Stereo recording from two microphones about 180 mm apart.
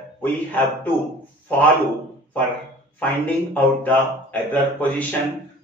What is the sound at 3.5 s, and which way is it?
Speech, 10° left (ahead or behind).